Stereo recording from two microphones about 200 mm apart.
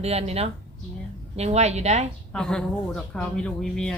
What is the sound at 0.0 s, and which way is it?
Speech, 30° right (ahead or behind).